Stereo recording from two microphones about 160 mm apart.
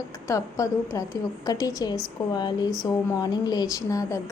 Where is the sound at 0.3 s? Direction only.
20° left (ahead or behind).